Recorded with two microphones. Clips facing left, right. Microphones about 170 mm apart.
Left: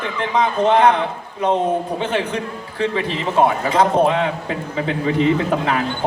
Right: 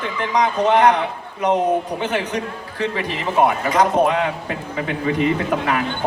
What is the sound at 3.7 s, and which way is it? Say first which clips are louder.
Speech: left 1 dB; 25° left (ahead or behind).